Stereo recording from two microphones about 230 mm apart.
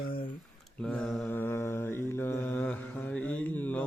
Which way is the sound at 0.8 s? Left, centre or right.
Centre.